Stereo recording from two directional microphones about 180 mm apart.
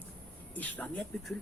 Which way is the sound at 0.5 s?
10° left (ahead or behind).